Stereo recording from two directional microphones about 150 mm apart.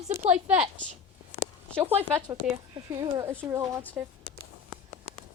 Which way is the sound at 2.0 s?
25° right (ahead or behind).